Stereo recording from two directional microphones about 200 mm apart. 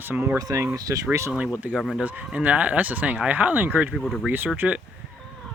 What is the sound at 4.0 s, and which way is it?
Speech, centre (ahead or behind).